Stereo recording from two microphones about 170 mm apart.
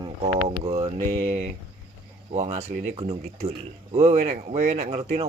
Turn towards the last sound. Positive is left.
turn(degrees=-35)  # may be behind; listen again after turning